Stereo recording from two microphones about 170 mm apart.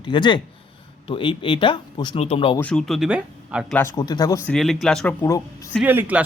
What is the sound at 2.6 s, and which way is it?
Speech, 5° left (ahead or behind).